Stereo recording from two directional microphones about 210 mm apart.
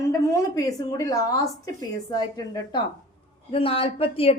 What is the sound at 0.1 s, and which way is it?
A woman's voice, 15° left (ahead or behind).